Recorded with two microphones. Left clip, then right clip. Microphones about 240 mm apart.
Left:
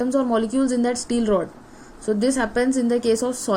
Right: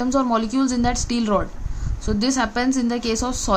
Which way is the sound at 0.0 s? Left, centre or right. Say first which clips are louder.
Even; right.